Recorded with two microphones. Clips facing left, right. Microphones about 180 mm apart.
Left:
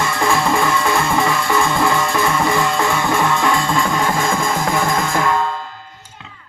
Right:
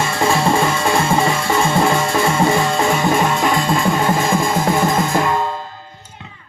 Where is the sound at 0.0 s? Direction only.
25° right (ahead or behind).